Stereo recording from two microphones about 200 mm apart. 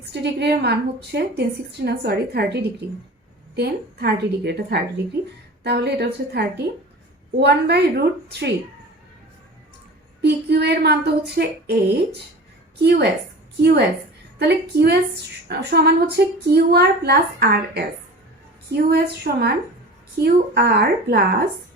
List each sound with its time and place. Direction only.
0.0 s a woman's voice: 55° right (ahead or behind)
10.2 s a woman's voice: 55° right (ahead or behind)